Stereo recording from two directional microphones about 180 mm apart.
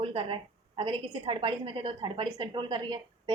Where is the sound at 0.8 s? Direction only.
30° right (ahead or behind).